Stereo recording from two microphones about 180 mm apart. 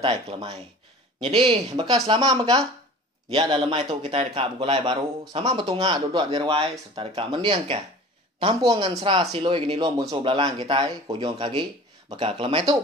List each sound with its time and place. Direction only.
0.0 s a woman's voice: 30° right (ahead or behind)